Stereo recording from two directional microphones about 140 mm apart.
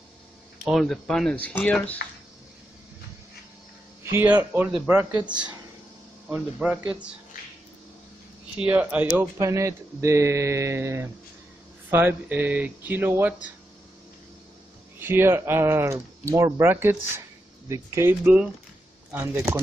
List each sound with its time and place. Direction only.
0.7 s speech: centre (ahead or behind)
4.0 s speech: 15° right (ahead or behind)
8.5 s speech: 10° right (ahead or behind)
9.4 s speech: 20° right (ahead or behind)
15.0 s speech: 15° right (ahead or behind)
18.2 s speech: 10° right (ahead or behind)